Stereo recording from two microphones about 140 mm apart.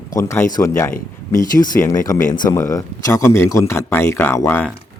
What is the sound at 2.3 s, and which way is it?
Speech, 25° left (ahead or behind).